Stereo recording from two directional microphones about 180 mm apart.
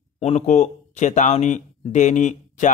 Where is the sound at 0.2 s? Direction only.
40° left (ahead or behind).